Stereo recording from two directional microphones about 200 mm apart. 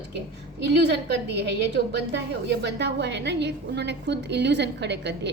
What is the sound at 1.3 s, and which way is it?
A woman's voice, 60° right (ahead or behind).